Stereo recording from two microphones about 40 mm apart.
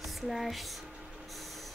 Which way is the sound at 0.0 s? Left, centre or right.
Centre.